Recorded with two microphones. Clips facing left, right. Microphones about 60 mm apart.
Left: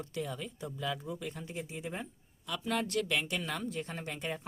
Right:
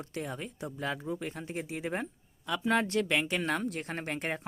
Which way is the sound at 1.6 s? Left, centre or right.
Right.